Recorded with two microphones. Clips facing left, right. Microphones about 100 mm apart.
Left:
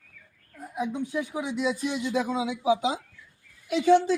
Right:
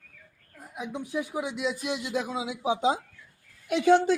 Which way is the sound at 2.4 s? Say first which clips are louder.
Left 3 dB; 25° right (ahead or behind).